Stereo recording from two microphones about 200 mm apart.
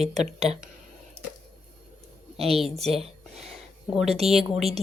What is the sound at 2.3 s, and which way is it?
Speech, 30° right (ahead or behind).